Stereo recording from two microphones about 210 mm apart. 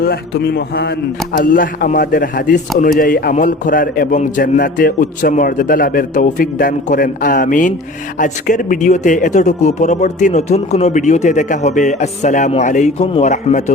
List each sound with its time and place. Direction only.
0.0 s a man's voice: 50° left (ahead or behind)